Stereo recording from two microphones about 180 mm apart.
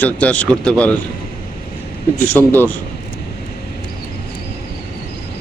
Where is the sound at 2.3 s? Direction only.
10° left (ahead or behind).